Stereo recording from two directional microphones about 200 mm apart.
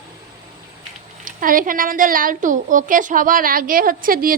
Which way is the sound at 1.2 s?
45° right (ahead or behind).